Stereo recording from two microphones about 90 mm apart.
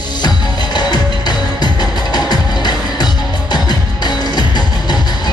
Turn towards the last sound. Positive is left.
turn(degrees=50)  # may be behind; listen again after turning